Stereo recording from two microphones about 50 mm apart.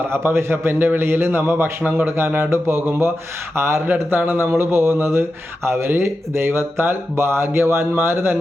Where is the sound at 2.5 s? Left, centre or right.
Right.